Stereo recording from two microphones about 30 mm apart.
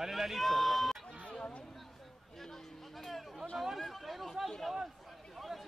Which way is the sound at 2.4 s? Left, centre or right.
Centre.